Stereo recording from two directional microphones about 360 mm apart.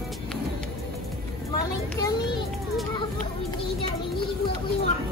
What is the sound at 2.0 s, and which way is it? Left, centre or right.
Speech, centre.